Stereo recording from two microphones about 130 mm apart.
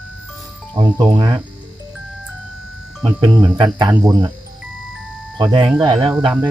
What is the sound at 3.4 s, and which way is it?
Cricket, 40° right (ahead or behind).